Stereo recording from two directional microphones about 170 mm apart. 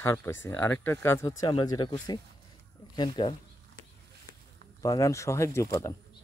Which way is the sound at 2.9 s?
30° left (ahead or behind).